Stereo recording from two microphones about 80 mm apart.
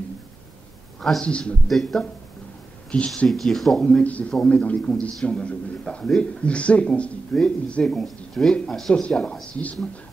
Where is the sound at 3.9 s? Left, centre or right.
Centre.